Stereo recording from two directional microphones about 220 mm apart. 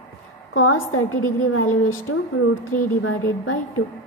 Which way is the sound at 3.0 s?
75° left (ahead or behind).